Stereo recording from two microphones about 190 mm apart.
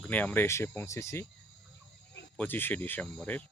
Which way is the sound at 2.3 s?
10° left (ahead or behind).